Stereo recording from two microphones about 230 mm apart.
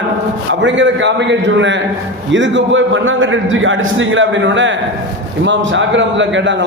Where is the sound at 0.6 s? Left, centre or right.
Right.